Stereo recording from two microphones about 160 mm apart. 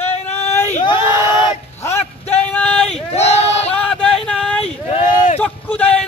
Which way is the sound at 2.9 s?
40° left (ahead or behind).